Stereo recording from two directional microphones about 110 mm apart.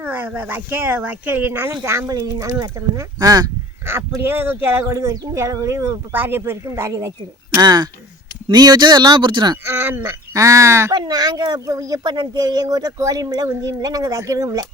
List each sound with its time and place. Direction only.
0.0 s speech: 20° right (ahead or behind); by 3.5 s 35° right (ahead or behind)
3.8 s speech: 20° right (ahead or behind)
7.6 s speech: 40° right (ahead or behind)
9.6 s speech: 20° right (ahead or behind)
11.0 s speech: 35° right (ahead or behind)